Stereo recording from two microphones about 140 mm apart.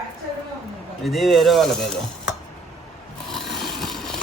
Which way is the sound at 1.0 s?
Centre (ahead or behind).